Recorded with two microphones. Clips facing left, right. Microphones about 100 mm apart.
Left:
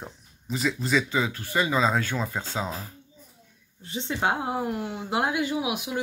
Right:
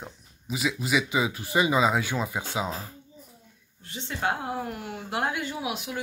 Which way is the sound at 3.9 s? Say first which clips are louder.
Left 3 dB; 15° left (ahead or behind).